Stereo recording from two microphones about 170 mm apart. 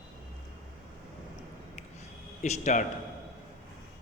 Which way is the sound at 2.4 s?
45° left (ahead or behind).